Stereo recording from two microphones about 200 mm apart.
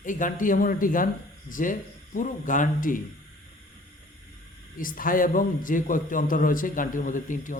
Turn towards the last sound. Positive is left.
turn(degrees=40)  # may be behind; listen again after turning